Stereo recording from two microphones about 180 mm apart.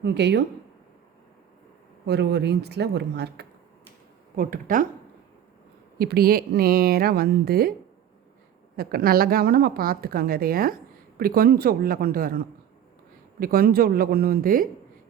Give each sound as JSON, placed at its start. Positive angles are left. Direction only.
{"t": 0.0, "sound": "speech", "side_deg": -70}
{"t": 2.0, "sound": "speech", "side_deg": -70}
{"t": 4.4, "sound": "speech", "side_deg": -50}
{"t": 6.0, "sound": "a woman's voice", "side_deg": -55}
{"t": 8.7, "sound": "a woman's voice", "side_deg": -55}